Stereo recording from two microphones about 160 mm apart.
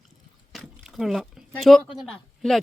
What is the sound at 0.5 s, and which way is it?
Speech, centre (ahead or behind).